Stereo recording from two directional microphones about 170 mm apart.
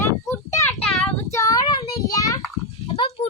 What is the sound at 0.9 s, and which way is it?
Child singing, 5° left (ahead or behind).